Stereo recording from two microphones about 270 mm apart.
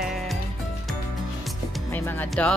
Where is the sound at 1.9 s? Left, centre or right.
Centre.